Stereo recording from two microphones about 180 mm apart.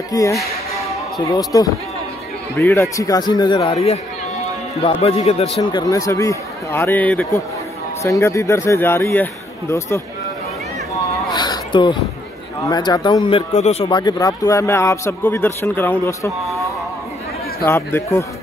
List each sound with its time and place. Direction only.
0.1 s a man's voice: 20° left (ahead or behind)
1.5 s a man's voice: 20° left (ahead or behind); by 5.8 s 35° left (ahead or behind)
5.8 s a man's voice: 20° left (ahead or behind)
11.3 s a sound: 25° left (ahead or behind)
12.6 s a man's voice: 20° left (ahead or behind)
13.6 s speech: 40° left (ahead or behind)
13.8 s a man's voice: 25° left (ahead or behind)
17.6 s a man's voice: 15° left (ahead or behind)